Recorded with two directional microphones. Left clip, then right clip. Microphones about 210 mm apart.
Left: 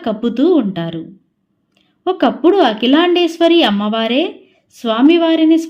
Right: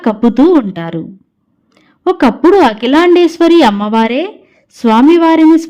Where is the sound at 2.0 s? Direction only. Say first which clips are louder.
Right 4 dB; 35° right (ahead or behind).